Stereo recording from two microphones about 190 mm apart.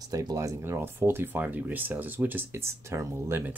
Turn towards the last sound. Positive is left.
turn(degrees=-15)  # may be behind; listen again after turning